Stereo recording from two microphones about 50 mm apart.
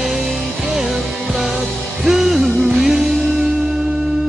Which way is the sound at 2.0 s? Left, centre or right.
Right.